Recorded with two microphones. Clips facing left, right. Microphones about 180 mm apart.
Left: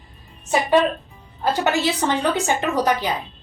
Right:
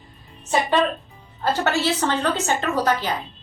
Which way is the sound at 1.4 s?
15° left (ahead or behind).